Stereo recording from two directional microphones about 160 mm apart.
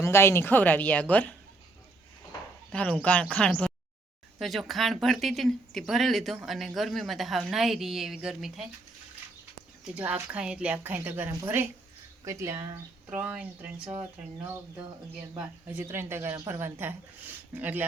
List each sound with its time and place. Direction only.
0.0 s speech: 15° left (ahead or behind)
2.7 s speech: 10° left (ahead or behind)
9.8 s a woman's voice: 5° right (ahead or behind)
15.7 s a woman's voice: 15° right (ahead or behind)